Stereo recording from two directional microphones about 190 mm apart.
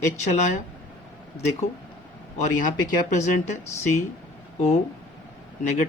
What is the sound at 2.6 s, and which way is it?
Speech, 40° left (ahead or behind).